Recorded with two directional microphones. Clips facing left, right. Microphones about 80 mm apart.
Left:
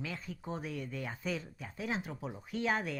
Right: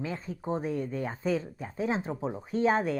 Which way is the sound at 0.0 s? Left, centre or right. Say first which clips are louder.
Right 7 dB; right.